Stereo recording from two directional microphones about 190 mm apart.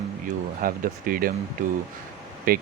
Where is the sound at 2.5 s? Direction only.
50° right (ahead or behind).